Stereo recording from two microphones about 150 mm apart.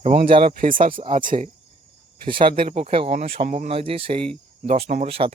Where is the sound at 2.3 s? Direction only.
35° right (ahead or behind).